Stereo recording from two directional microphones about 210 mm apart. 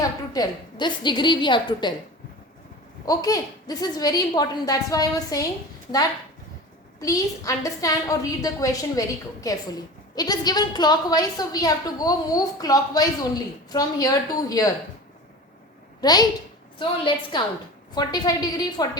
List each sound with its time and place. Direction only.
0.0 s a woman's voice: 20° left (ahead or behind)
3.1 s a woman's voice: 15° left (ahead or behind)
7.0 s a woman's voice: 15° left (ahead or behind)
16.0 s a child's voice: 20° left (ahead or behind)